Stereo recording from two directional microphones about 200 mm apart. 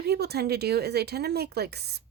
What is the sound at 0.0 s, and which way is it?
Speech, 55° right (ahead or behind).